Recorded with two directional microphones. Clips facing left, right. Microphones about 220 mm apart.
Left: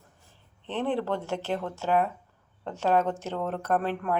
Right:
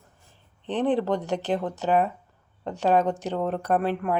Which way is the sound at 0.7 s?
15° right (ahead or behind).